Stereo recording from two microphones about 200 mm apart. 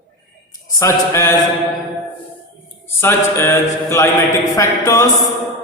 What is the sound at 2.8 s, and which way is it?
Mantra, 10° left (ahead or behind).